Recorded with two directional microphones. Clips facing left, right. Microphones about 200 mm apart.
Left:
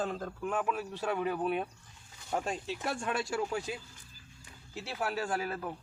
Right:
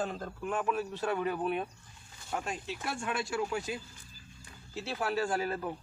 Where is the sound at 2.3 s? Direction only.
40° left (ahead or behind).